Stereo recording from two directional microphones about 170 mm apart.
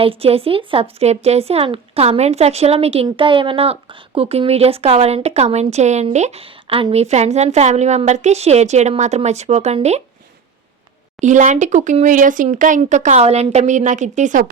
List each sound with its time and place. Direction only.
0.0 s speech: 35° right (ahead or behind)
11.2 s speech: 45° right (ahead or behind)